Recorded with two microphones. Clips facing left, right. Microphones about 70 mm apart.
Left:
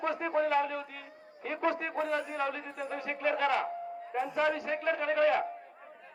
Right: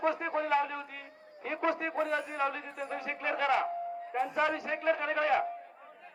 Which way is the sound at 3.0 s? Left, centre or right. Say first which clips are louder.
Left 3 dB; centre.